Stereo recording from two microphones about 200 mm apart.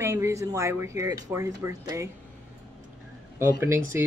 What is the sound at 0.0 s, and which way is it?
A man's voice, 15° right (ahead or behind).